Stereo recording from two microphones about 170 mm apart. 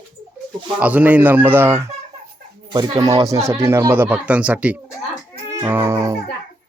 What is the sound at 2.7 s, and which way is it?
Speech, 25° right (ahead or behind).